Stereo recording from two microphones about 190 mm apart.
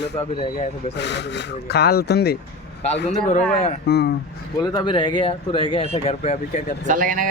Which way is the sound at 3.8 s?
60° left (ahead or behind).